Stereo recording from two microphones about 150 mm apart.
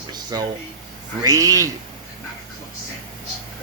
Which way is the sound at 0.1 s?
25° right (ahead or behind).